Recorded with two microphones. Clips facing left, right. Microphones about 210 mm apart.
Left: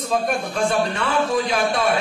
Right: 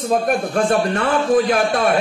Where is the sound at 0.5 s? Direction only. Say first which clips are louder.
Right 3 dB; 50° right (ahead or behind).